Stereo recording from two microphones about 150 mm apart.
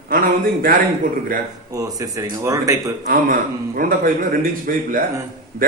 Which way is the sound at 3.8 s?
70° right (ahead or behind).